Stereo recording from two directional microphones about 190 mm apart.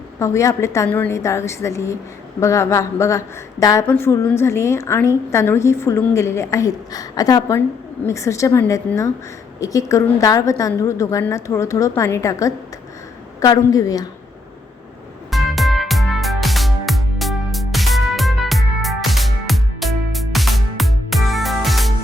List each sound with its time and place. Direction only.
0.2 s a woman's voice: 15° left (ahead or behind)
15.3 s music: centre (ahead or behind)